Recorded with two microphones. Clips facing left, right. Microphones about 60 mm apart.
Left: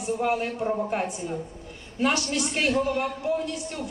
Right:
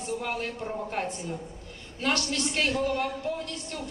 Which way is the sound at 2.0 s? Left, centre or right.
Centre.